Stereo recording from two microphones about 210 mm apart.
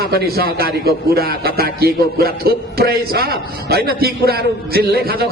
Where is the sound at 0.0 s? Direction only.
50° right (ahead or behind).